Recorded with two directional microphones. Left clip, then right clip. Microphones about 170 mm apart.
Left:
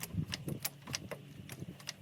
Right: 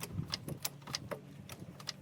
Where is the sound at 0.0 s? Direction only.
10° left (ahead or behind).